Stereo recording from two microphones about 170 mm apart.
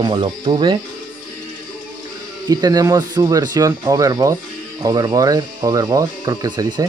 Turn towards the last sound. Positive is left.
turn(degrees=-25)  # may be behind; listen again after turning